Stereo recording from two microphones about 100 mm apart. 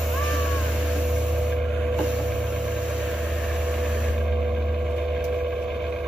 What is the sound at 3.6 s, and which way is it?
Vehicle, 10° right (ahead or behind).